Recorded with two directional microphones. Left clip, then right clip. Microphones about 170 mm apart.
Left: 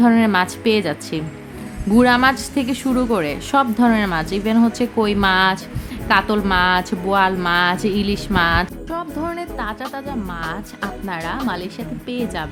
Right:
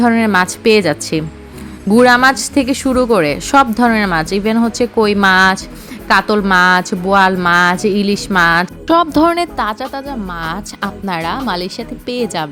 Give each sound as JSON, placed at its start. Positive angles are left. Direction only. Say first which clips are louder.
{"t": 0.0, "sound": "a woman's voice", "louder": "right 4 dB", "side_deg": -15}
{"t": 8.9, "sound": "speech", "louder": "right 14 dB", "side_deg": -40}
{"t": 9.9, "sound": "speech", "louder": "right 5 dB", "side_deg": -30}